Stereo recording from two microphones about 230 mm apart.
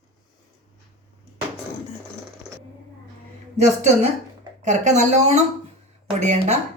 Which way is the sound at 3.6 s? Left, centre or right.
Right.